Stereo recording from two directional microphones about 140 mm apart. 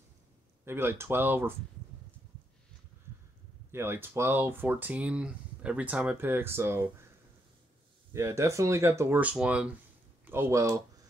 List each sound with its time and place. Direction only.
0.7 s speech: 15° right (ahead or behind)
3.7 s speech: 15° right (ahead or behind)
8.1 s speech: 20° right (ahead or behind)
9.3 s speech: 5° right (ahead or behind)